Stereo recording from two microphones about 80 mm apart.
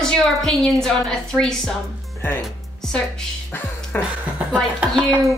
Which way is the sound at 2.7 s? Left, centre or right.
Centre.